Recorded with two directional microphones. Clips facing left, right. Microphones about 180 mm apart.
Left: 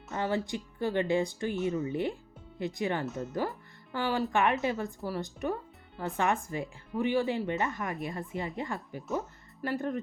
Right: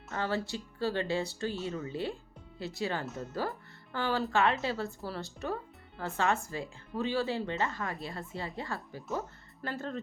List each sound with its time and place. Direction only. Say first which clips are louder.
0.1 s speech: left 2 dB; 15° left (ahead or behind)